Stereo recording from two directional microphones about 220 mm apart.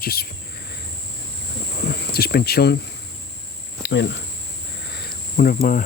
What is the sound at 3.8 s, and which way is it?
Speech, 50° left (ahead or behind).